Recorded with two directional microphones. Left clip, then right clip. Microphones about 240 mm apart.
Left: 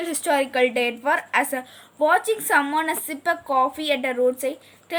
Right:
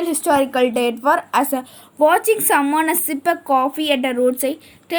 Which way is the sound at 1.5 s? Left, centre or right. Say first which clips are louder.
Right 5 dB; right.